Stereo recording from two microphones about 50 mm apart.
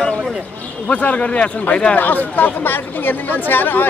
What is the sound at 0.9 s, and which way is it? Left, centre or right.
Speech, left.